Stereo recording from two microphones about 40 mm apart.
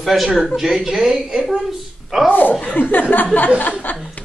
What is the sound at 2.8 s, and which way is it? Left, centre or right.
Speech, left.